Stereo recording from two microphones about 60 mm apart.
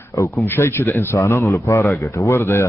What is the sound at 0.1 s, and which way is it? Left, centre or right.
Speech, left.